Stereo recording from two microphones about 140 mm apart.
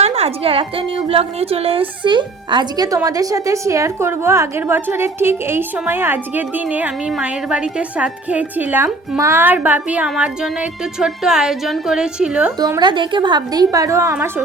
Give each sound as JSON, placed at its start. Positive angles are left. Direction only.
{"t": 0.0, "sound": "a woman's voice", "side_deg": -50}
{"t": 12.5, "sound": "a woman's voice", "side_deg": -30}